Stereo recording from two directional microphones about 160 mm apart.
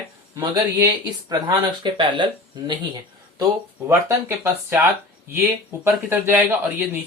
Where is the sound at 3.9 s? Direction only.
15° right (ahead or behind).